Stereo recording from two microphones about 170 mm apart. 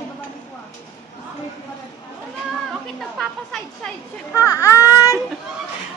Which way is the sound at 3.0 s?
5° left (ahead or behind).